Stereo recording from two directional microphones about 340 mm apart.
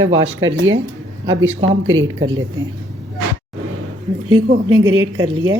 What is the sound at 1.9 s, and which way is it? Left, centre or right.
Speech, right.